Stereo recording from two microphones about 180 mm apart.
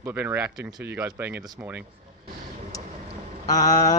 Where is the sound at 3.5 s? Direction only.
20° left (ahead or behind).